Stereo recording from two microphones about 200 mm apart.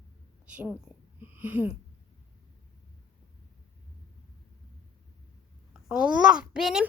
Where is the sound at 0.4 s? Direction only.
5° right (ahead or behind).